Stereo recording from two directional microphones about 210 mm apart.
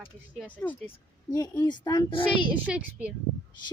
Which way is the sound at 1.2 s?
20° left (ahead or behind).